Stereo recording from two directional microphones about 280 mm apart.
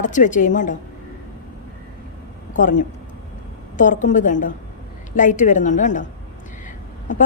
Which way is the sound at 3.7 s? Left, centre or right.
Left.